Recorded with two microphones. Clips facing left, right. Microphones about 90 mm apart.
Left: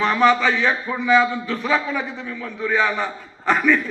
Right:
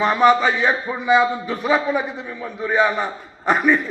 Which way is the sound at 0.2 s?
35° right (ahead or behind).